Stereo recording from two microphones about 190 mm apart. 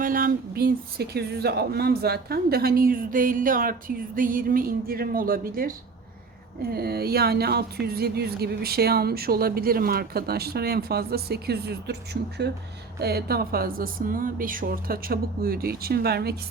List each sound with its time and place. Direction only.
0.0 s speech: 45° right (ahead or behind)